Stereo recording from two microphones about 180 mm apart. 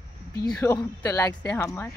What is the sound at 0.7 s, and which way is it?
Speech, 15° left (ahead or behind).